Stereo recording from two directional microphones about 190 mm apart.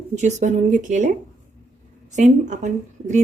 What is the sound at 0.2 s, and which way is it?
Speech, 40° right (ahead or behind).